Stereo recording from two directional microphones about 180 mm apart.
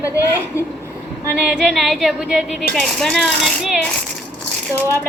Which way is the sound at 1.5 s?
5° right (ahead or behind).